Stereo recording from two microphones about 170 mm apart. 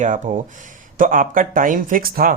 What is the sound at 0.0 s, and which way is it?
Speech, 50° right (ahead or behind).